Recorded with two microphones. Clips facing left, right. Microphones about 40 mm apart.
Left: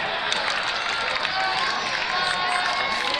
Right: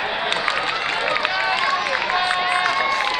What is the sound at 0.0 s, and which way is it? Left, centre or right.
Run, right.